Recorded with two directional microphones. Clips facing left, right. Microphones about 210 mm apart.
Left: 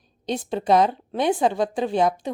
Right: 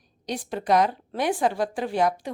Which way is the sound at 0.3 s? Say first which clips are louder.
Left 3 dB; 25° left (ahead or behind).